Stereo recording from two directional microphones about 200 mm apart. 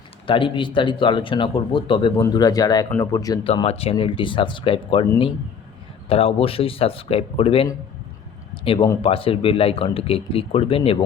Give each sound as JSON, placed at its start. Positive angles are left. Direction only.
{"t": 0.3, "sound": "speech", "side_deg": 25}
{"t": 6.1, "sound": "speech", "side_deg": 30}
{"t": 9.0, "sound": "speech", "side_deg": 30}